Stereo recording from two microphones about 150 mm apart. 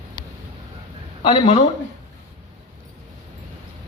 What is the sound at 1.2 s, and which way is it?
Speech, 35° left (ahead or behind).